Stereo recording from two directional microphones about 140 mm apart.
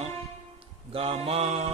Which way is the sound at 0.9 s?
45° right (ahead or behind).